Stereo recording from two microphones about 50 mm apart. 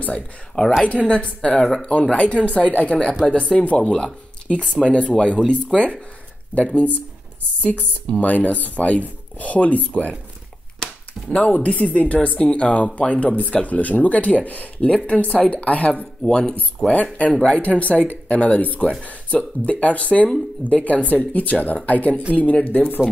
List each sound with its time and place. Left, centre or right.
0.0 s speech: left
8.1 s speech: left
11.2 s speech: left